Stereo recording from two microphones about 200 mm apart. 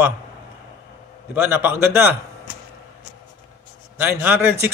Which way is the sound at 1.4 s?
10° right (ahead or behind).